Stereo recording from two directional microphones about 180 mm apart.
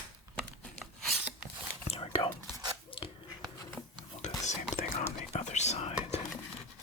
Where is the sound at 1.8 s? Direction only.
35° left (ahead or behind).